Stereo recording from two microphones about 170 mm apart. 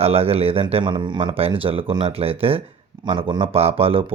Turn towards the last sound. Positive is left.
turn(degrees=-35)  # may be behind; listen again after turning